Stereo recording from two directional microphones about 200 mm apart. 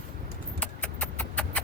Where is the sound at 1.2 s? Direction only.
5° left (ahead or behind).